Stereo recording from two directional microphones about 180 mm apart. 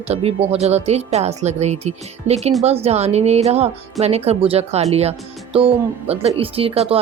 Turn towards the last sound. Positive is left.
turn(degrees=-35)  # may be behind; listen again after turning